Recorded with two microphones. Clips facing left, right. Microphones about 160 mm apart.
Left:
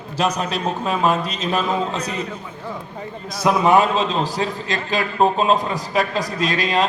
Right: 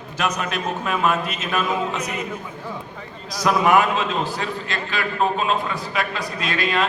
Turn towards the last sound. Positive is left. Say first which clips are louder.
# left 3 dB
turn(degrees=40)  # may be behind; listen again after turning